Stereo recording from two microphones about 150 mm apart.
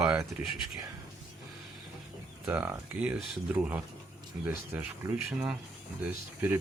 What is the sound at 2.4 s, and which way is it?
Speech, 15° right (ahead or behind).